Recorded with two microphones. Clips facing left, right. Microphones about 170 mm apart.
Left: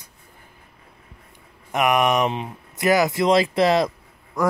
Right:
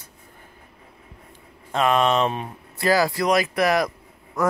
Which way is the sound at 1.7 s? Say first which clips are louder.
Even; 15° left (ahead or behind).